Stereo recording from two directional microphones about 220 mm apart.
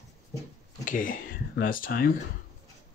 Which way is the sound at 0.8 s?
40° left (ahead or behind).